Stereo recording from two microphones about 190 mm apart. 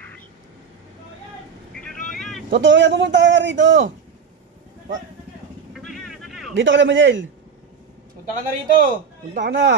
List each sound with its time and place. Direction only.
1.8 s vehicle: 5° left (ahead or behind)
2.5 s a man's voice: 75° right (ahead or behind)
5.7 s vehicle: centre (ahead or behind)
6.5 s a man's voice: 70° right (ahead or behind)
8.4 s a man's voice: 50° right (ahead or behind)
9.5 s a man's voice: 70° right (ahead or behind)